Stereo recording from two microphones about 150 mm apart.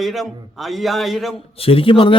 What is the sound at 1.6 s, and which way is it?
Speech, 40° left (ahead or behind).